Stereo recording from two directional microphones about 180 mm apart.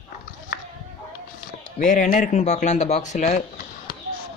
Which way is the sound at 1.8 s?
45° left (ahead or behind).